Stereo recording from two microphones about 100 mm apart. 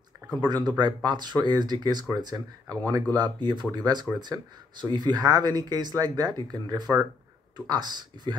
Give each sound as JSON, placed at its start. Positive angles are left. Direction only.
{"t": 0.5, "sound": "speech", "side_deg": -45}